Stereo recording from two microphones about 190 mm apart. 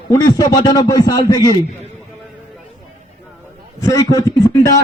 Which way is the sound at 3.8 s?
20° left (ahead or behind).